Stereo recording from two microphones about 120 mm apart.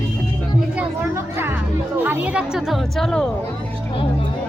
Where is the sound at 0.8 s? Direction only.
20° right (ahead or behind).